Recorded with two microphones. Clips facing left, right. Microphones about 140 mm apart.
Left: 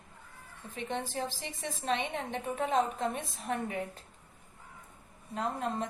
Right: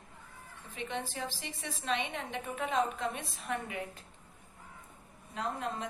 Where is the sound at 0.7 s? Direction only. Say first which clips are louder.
Left 3 dB; 45° left (ahead or behind).